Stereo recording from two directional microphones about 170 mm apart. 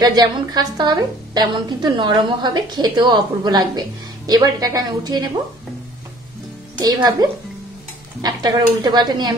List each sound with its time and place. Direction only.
0.0 s a woman's voice: 25° right (ahead or behind)
6.8 s a woman's voice: 25° right (ahead or behind)